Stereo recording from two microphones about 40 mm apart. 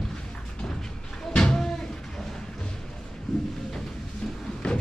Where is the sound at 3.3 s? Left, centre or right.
Centre.